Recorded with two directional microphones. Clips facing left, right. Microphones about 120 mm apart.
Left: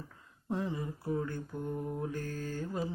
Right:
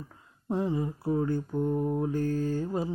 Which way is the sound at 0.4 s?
25° right (ahead or behind).